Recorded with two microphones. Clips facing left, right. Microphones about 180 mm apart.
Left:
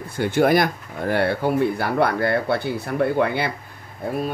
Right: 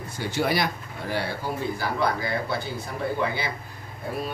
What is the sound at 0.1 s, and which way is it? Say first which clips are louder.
Speech: left 8 dB; 55° left (ahead or behind).